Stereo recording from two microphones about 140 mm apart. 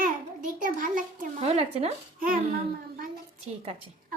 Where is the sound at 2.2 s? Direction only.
90° right.